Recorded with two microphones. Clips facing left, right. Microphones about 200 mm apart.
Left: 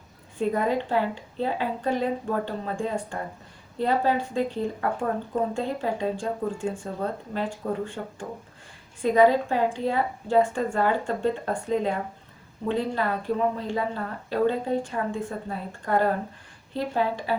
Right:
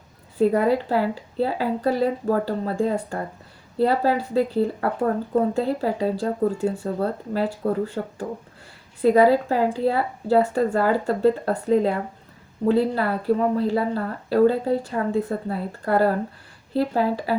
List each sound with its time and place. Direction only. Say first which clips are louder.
0.3 s a woman's voice: right 6 dB; 35° right (ahead or behind)